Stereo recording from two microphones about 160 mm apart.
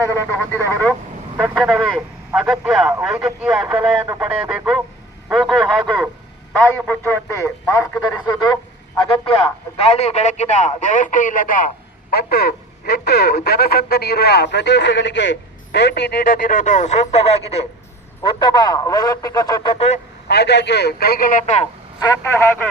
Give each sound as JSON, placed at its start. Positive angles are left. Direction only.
{"t": 0.0, "sound": "speech", "side_deg": 15}
{"t": 1.4, "sound": "a man's voice", "side_deg": 0}
{"t": 12.1, "sound": "speech", "side_deg": 75}
{"t": 18.2, "sound": "speech", "side_deg": 30}
{"t": 20.2, "sound": "speech", "side_deg": 90}
{"t": 22.0, "sound": "speech", "side_deg": 20}